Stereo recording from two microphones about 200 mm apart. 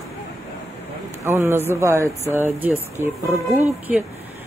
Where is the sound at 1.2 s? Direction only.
10° right (ahead or behind).